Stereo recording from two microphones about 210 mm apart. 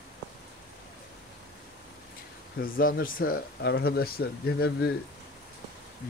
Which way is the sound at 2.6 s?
45° left (ahead or behind).